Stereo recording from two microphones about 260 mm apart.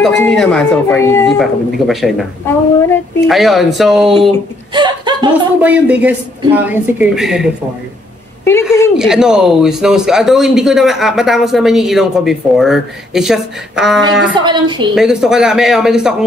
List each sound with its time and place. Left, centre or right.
0.0 s speech: centre
4.7 s chuckle: centre
5.3 s a woman's voice: centre
8.9 s speech: centre
14.3 s a woman's voice: centre
15.0 s speech: centre